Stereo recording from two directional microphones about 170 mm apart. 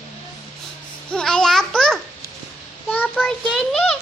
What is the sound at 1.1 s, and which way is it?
Babbling, 5° left (ahead or behind).